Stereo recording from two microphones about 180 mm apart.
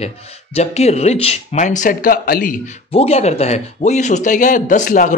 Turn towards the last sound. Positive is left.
turn(degrees=45)  # may be behind; listen again after turning